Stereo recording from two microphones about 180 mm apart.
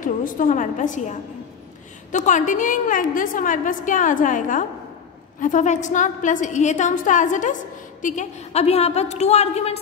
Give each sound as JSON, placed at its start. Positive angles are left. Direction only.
{"t": 0.0, "sound": "a woman's voice", "side_deg": 45}
{"t": 2.1, "sound": "a woman's voice", "side_deg": 45}